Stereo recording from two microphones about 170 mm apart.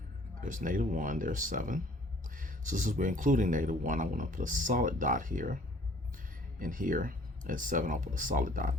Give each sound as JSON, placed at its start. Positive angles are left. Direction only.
{"t": 0.4, "sound": "speech", "side_deg": -50}
{"t": 6.6, "sound": "speech", "side_deg": -50}